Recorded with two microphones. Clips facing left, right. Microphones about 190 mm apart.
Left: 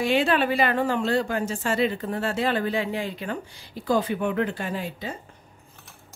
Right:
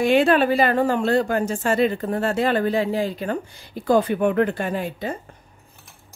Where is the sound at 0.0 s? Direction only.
50° right (ahead or behind).